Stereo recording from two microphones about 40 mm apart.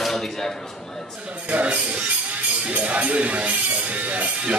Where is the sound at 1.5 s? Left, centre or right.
Right.